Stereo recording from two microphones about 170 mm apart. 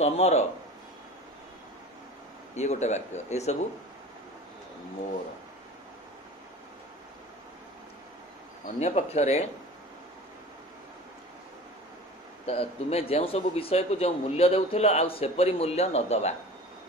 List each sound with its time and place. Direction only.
0.0 s a man's voice: 40° left (ahead or behind)
2.5 s speech: 40° left (ahead or behind)
8.6 s a man's voice: 40° left (ahead or behind)
12.4 s a man's voice: 35° left (ahead or behind)